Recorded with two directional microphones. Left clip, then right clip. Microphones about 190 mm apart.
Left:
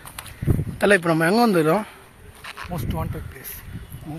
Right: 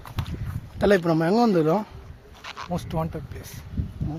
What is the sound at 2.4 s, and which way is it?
Insect, centre (ahead or behind).